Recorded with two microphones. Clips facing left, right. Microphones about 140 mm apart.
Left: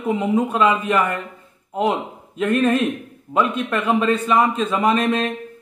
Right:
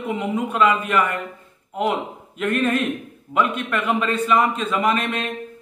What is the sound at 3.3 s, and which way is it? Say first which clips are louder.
A man's voice: left 2 dB; 25° left (ahead or behind).